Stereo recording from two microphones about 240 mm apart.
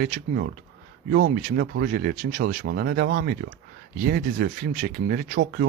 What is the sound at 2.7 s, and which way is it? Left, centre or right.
Speech, right.